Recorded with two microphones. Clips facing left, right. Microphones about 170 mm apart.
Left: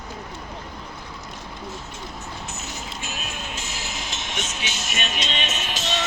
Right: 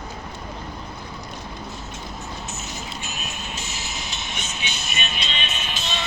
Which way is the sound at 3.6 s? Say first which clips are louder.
Left 1 dB; 90° left.